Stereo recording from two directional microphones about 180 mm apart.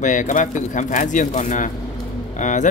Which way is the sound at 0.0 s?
45° left (ahead or behind).